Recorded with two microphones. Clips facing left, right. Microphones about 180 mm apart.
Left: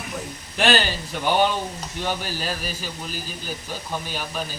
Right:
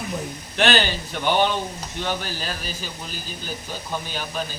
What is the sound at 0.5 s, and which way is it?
A man's voice, 5° left (ahead or behind).